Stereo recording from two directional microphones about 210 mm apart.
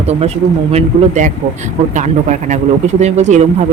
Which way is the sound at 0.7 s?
35° right (ahead or behind).